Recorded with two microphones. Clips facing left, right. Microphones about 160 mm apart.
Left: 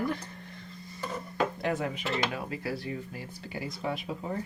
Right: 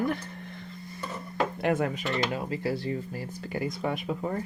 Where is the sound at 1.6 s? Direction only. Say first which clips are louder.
Right 4 dB; 55° right (ahead or behind).